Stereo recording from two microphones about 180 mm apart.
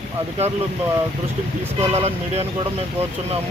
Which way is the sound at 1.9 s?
35° right (ahead or behind).